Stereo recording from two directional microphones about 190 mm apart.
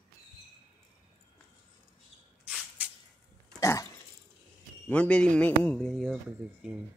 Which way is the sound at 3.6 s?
15° left (ahead or behind).